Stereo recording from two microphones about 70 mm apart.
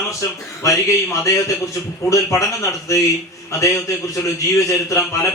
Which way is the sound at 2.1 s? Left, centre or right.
Left.